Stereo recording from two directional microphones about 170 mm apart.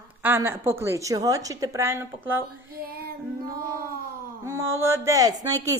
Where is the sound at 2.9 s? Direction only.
60° right (ahead or behind).